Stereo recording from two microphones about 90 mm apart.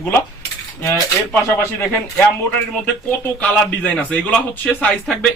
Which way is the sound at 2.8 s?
15° left (ahead or behind).